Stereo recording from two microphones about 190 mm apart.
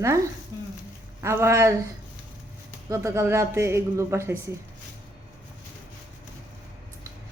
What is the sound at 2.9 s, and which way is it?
A woman's voice, 15° right (ahead or behind).